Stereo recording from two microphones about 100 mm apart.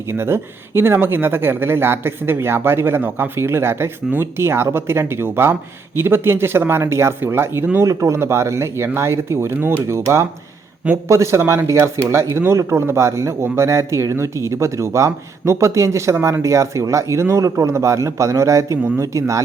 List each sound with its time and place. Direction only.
0.1 s speech: 25° right (ahead or behind)
18.8 s speech: 20° right (ahead or behind)
19.0 s speech: 30° right (ahead or behind)